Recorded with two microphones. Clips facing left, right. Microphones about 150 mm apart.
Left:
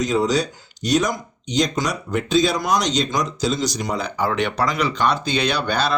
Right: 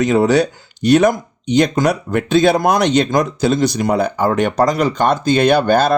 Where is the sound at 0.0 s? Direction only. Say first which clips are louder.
Right 6 dB; 60° right (ahead or behind).